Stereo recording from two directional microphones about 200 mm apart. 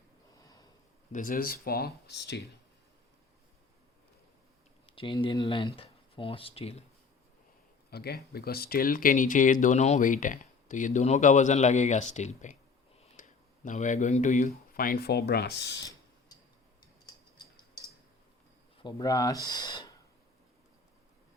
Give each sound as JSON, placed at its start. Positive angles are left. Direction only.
{"t": 0.3, "sound": "snort", "side_deg": 20}
{"t": 1.1, "sound": "speech", "side_deg": 45}
{"t": 4.9, "sound": "speech", "side_deg": 25}
{"t": 7.9, "sound": "speech", "side_deg": 50}
{"t": 15.8, "sound": "tick", "side_deg": 15}
{"t": 18.8, "sound": "speech", "side_deg": 25}